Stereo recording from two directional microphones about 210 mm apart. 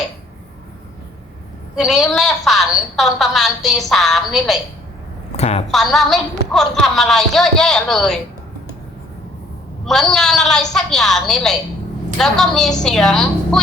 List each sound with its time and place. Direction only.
1.7 s a woman's voice: centre (ahead or behind)
5.4 s a woman's voice: 30° left (ahead or behind)
5.7 s a woman's voice: centre (ahead or behind)
9.8 s a woman's voice: centre (ahead or behind)